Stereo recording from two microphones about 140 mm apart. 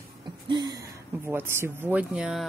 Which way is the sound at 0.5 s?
30° right (ahead or behind).